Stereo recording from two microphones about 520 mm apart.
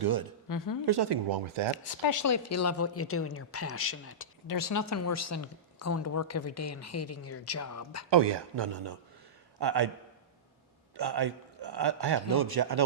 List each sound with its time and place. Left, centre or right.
0.0 s speech: right
0.4 s a woman's voice: left
0.9 s a man's voice: right
1.7 s speech: left
4.4 s speech: left
8.1 s a man's voice: right
10.9 s a man's voice: right